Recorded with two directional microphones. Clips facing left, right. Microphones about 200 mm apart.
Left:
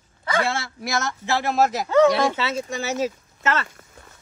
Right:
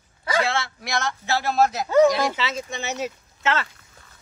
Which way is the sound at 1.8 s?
10° right (ahead or behind).